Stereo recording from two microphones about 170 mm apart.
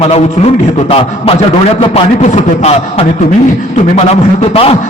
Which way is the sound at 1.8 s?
35° left (ahead or behind).